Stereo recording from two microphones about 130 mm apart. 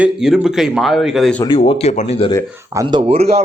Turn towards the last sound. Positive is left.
turn(degrees=-50)  # may be behind; listen again after turning